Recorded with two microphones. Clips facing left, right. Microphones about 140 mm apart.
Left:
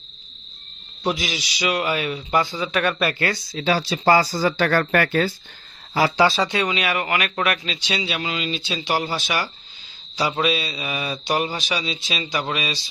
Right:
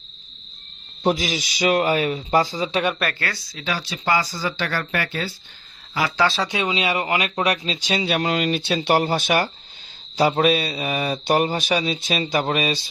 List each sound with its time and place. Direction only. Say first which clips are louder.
1.0 s speech: right 3 dB; 45° right (ahead or behind)
3.2 s speech: left 6 dB; 25° left (ahead or behind); by 5.3 s 50° left (ahead or behind)
6.2 s speech: left 2 dB; centre (ahead or behind)
6.5 s speech: even; 20° right (ahead or behind)
7.8 s speech: right 4 dB; 45° right (ahead or behind)